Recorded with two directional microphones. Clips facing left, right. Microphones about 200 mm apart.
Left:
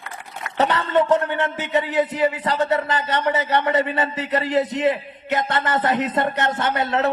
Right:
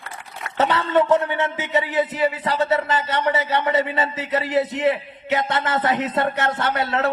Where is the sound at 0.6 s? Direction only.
15° left (ahead or behind).